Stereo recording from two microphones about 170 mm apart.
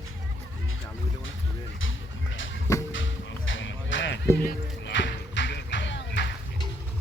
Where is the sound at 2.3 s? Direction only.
90° left.